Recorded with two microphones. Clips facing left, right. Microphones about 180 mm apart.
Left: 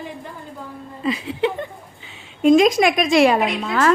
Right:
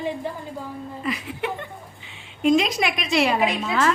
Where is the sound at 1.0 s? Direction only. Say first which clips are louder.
Left 8 dB; 25° left (ahead or behind).